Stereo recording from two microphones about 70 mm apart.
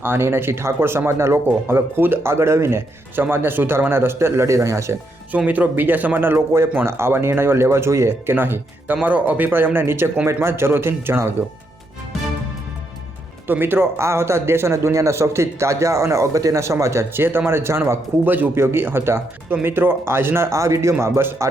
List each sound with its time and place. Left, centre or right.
0.0 s speech: right
5.5 s speech: right
13.5 s speech: right
18.3 s a man's voice: right